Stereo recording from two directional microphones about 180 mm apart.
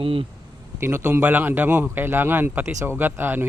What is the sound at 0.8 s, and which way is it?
A man's voice, 15° right (ahead or behind).